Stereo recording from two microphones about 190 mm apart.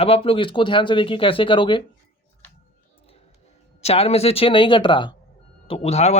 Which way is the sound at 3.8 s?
35° left (ahead or behind).